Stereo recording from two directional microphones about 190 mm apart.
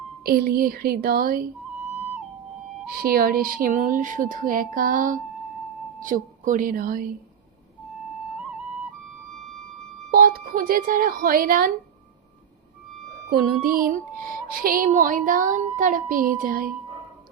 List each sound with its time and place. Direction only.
0.2 s child singing: 55° right (ahead or behind)
3.0 s child singing: 50° right (ahead or behind)
6.0 s speech: 45° right (ahead or behind)
10.1 s speech: 50° right (ahead or behind)
13.3 s child singing: 50° right (ahead or behind)